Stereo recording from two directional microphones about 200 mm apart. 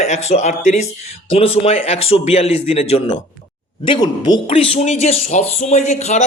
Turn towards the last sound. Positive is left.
turn(degrees=35)  # may be behind; listen again after turning